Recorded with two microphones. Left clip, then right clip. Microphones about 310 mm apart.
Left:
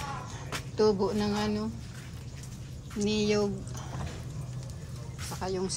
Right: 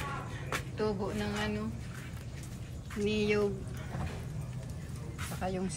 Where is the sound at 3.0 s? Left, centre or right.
Centre.